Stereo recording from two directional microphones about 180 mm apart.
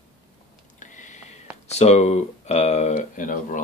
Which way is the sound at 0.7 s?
45° left (ahead or behind).